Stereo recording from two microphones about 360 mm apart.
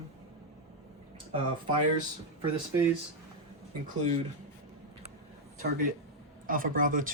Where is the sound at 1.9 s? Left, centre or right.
Centre.